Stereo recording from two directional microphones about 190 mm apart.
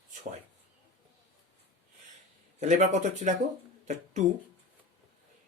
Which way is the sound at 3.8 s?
40° right (ahead or behind).